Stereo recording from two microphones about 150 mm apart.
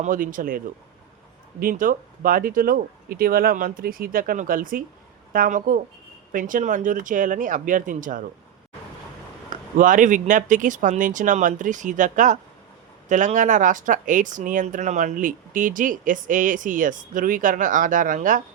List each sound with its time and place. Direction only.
0.0 s speech: 65° right (ahead or behind)
9.5 s speech: 60° right (ahead or behind)